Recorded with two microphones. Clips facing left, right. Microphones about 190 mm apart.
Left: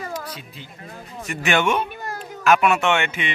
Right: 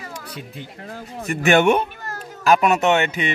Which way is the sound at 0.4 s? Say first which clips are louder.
Right 5 dB; 55° right (ahead or behind).